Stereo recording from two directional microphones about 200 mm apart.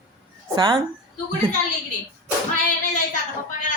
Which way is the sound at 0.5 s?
20° right (ahead or behind).